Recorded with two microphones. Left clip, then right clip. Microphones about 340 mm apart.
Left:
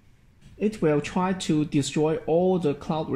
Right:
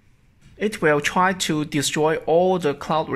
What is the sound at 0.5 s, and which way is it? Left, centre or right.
Speech, right.